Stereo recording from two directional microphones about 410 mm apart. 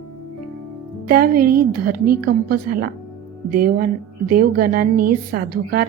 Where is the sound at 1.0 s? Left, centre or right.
Right.